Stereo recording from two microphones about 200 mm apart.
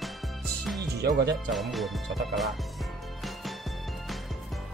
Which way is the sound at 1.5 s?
Centre (ahead or behind).